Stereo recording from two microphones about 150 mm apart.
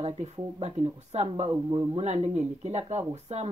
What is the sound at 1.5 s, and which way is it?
Speech, 25° right (ahead or behind).